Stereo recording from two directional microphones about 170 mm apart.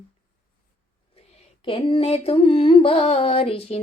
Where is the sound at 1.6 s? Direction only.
30° left (ahead or behind).